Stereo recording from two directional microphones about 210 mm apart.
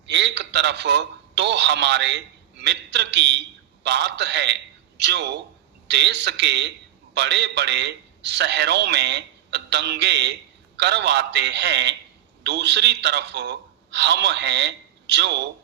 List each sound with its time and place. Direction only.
0.0 s a man's voice: 55° right (ahead or behind)